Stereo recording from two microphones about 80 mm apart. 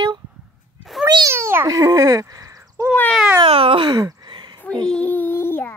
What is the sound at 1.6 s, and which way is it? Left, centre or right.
Speech, right.